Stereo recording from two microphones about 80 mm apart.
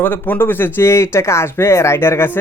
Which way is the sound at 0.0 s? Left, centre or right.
Left.